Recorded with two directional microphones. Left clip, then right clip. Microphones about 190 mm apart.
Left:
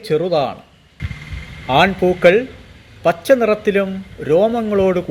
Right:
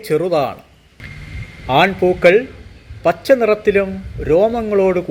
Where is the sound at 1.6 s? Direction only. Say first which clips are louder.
Even; 5° right (ahead or behind).